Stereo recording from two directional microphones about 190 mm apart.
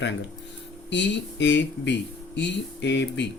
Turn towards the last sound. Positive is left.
turn(degrees=65)  # may be behind; listen again after turning